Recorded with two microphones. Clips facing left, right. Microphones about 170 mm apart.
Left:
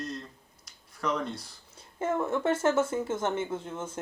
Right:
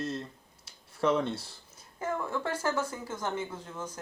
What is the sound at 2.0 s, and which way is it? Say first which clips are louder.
Speech: left 5 dB; 25° left (ahead or behind).